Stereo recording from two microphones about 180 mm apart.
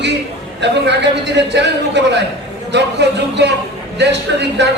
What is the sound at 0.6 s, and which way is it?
Speech, 75° right (ahead or behind).